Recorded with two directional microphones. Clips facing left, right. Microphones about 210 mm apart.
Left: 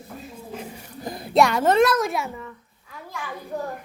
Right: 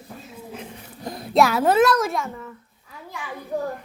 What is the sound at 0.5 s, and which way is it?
A woman's voice, centre (ahead or behind).